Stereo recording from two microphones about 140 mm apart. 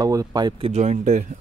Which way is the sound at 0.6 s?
55° right (ahead or behind).